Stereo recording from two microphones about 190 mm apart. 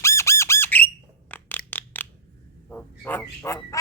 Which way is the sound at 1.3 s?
10° left (ahead or behind).